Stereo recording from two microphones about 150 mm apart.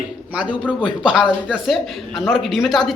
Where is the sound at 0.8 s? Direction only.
5° right (ahead or behind).